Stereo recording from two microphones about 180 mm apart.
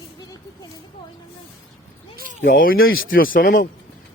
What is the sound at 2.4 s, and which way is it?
Speech, 50° left (ahead or behind).